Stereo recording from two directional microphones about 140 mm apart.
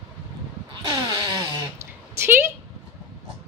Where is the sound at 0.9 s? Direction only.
30° right (ahead or behind).